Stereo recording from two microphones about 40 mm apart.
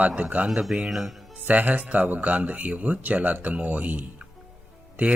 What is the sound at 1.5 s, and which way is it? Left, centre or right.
A man's voice, right.